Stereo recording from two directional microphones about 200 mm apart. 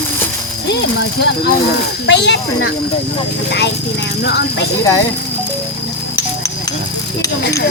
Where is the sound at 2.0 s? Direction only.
60° left (ahead or behind).